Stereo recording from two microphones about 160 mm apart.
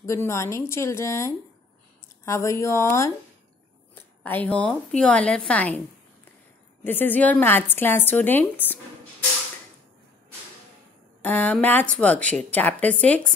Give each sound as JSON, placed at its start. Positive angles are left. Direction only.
{"t": 0.0, "sound": "a woman's voice", "side_deg": 20}
{"t": 6.8, "sound": "a woman's voice", "side_deg": 10}
{"t": 11.2, "sound": "a woman's voice", "side_deg": 10}